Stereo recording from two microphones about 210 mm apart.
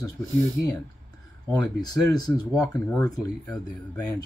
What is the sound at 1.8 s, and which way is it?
Speech, 20° left (ahead or behind).